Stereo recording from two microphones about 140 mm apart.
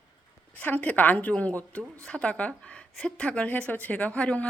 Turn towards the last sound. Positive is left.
turn(degrees=10)  # may be behind; listen again after turning